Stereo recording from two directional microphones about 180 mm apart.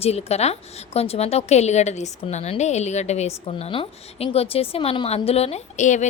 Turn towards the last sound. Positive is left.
turn(degrees=40)  # may be behind; listen again after turning